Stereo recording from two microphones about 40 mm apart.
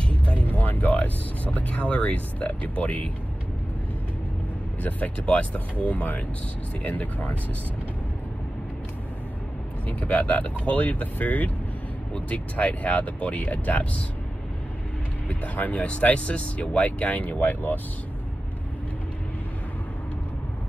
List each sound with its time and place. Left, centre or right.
0.2 s music: left
0.5 s speech: left
4.8 s speech: left
9.8 s speech: left
15.2 s speech: left